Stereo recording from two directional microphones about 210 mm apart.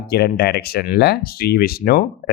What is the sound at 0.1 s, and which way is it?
Speech, 50° left (ahead or behind).